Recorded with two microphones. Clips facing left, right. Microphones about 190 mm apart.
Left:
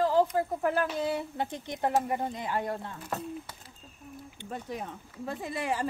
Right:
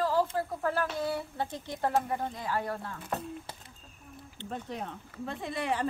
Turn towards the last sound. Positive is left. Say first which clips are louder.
# even
turn(degrees=5)  # may be behind; listen again after turning